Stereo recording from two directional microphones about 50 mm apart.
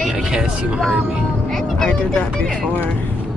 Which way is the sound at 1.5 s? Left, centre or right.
Centre.